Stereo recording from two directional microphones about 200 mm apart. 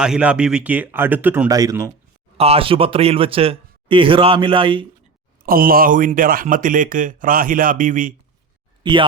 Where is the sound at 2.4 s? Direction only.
30° right (ahead or behind).